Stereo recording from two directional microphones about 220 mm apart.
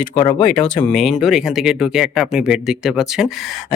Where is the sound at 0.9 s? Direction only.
Centre (ahead or behind).